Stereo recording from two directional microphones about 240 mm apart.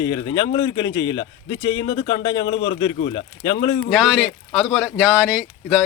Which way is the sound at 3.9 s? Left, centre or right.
Centre.